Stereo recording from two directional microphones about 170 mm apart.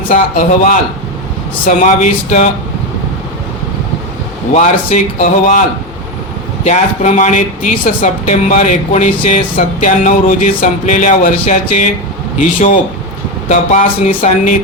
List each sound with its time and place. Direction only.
0.1 s speech: 50° left (ahead or behind)
4.5 s speech: 45° left (ahead or behind)
6.7 s speech: 45° left (ahead or behind)